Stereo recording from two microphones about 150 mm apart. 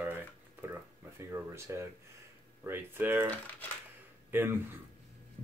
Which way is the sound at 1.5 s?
20° right (ahead or behind).